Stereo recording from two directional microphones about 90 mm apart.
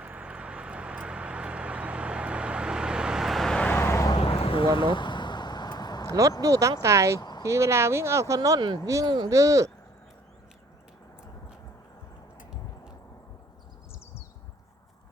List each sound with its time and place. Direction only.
0.0 s vehicle: 15° right (ahead or behind); by 3.7 s 5° left (ahead or behind)
3.7 s vehicle: 25° left (ahead or behind)
4.2 s a sound: 90° left; by 6.1 s 50° left (ahead or behind)
6.1 s speech: 40° right (ahead or behind)
7.2 s a sound: 50° left (ahead or behind)
7.4 s speech: 35° right (ahead or behind)
8.4 s speech: 45° right (ahead or behind)
9.3 s speech: 35° right (ahead or behind)